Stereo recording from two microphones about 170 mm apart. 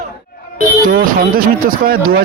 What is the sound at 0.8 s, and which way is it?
Speech, 55° right (ahead or behind).